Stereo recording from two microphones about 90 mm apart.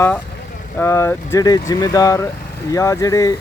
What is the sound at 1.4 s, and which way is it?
Vehicle, 45° left (ahead or behind).